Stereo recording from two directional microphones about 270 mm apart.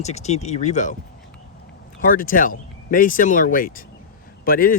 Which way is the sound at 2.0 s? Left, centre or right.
Left.